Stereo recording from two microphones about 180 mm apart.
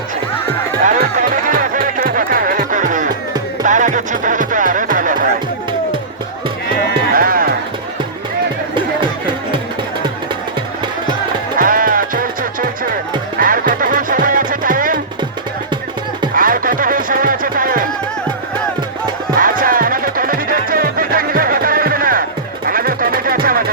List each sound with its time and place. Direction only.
0.9 s music: 45° right (ahead or behind)
7.2 s music: 55° right (ahead or behind)
11.5 s music: 50° right (ahead or behind)
16.3 s music: 50° right (ahead or behind)
19.4 s music: 50° right (ahead or behind)